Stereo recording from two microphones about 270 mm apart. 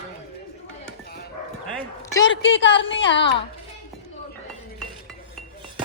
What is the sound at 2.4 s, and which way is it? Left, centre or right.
A woman's voice, left.